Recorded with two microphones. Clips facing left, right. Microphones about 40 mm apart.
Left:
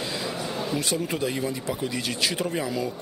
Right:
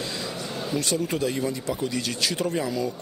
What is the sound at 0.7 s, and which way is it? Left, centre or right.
Speech, centre.